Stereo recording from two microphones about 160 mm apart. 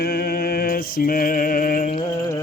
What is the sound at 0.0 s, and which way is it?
Mantra, 75° left (ahead or behind).